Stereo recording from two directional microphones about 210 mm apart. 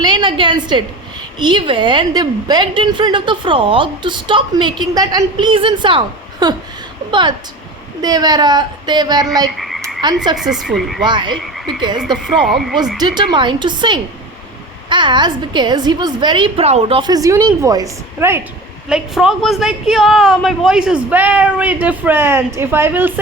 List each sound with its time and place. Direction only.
0.0 s a woman's voice: 20° right (ahead or behind)
9.6 s frog: centre (ahead or behind)
10.3 s speech: centre (ahead or behind)
11.0 s a woman's voice: 20° right (ahead or behind)
11.9 s speech: 5° right (ahead or behind)
13.3 s a woman's voice: 20° right (ahead or behind)